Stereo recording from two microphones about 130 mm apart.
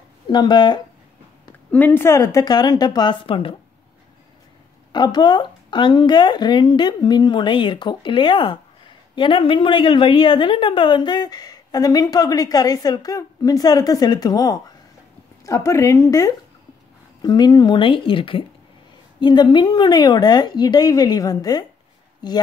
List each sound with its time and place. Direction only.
0.3 s a woman's voice: 35° left (ahead or behind)
1.7 s a woman's voice: 10° left (ahead or behind); by 3.5 s 45° left (ahead or behind)
4.9 s a woman's voice: 35° left (ahead or behind)